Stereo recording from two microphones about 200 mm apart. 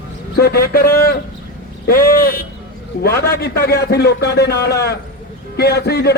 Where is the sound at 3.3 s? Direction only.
50° left (ahead or behind).